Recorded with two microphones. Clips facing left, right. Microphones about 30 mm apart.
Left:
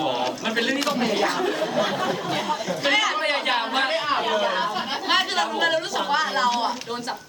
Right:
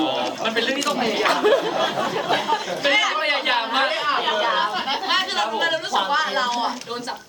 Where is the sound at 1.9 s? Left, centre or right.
Centre.